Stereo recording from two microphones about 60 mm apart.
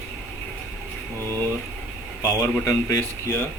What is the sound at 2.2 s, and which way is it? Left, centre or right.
Speech, left.